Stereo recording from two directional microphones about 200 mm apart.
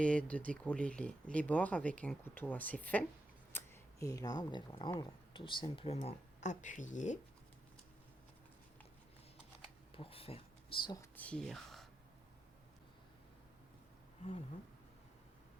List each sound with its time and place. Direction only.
0.0 s speech: 5° left (ahead or behind); by 7.2 s 40° left (ahead or behind)
9.9 s speech: 30° left (ahead or behind); by 11.9 s centre (ahead or behind)